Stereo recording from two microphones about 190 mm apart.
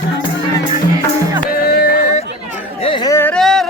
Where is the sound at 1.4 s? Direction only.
50° left (ahead or behind).